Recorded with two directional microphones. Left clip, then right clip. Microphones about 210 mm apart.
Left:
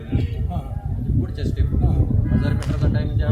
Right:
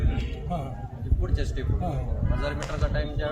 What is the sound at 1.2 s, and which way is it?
Speech, centre (ahead or behind).